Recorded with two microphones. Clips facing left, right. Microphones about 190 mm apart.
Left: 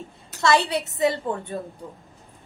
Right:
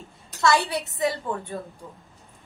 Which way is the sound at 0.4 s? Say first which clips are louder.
Left 1 dB; 20° left (ahead or behind).